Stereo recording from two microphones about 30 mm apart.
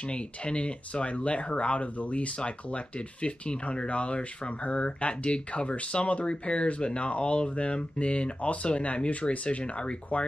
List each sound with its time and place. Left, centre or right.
0.1 s speech: left